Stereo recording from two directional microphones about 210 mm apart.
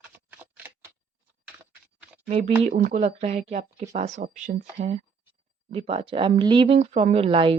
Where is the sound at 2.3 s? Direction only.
30° right (ahead or behind).